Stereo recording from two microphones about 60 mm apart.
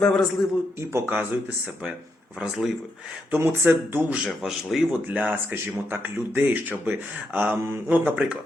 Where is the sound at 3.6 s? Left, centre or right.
Right.